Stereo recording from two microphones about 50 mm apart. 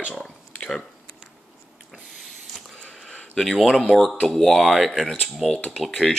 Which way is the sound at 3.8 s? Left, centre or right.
Centre.